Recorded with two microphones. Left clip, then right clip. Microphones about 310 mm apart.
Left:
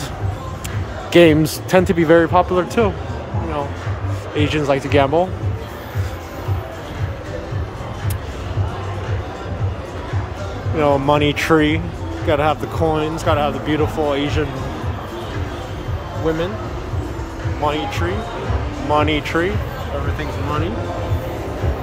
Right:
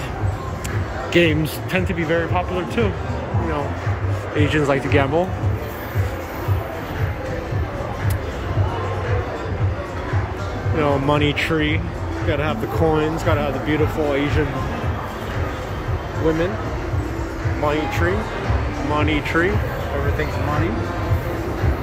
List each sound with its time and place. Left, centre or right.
1.1 s speech: centre
4.4 s speech: centre
10.8 s speech: centre
16.3 s speech: centre
18.9 s speech: centre